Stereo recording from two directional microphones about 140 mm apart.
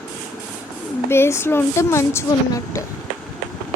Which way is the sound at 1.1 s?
20° left (ahead or behind).